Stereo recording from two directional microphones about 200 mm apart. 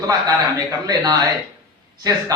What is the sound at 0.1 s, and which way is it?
A man's voice, 20° right (ahead or behind).